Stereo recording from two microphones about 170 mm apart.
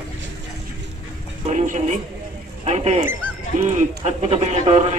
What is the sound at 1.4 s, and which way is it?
Speech, 45° right (ahead or behind).